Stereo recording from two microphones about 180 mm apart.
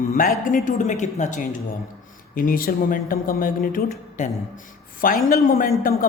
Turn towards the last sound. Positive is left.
turn(degrees=50)  # may be behind; listen again after turning